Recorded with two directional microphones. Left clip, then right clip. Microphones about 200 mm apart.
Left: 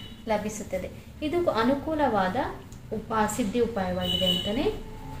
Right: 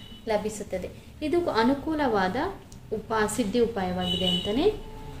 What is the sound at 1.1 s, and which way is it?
A woman's voice, 40° right (ahead or behind).